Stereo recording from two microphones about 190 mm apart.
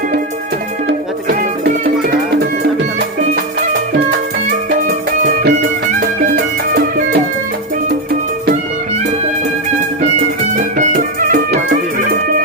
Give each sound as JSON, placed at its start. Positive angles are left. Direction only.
{"t": 1.3, "sound": "music", "side_deg": -55}
{"t": 4.9, "sound": "music", "side_deg": -45}
{"t": 10.6, "sound": "music", "side_deg": -40}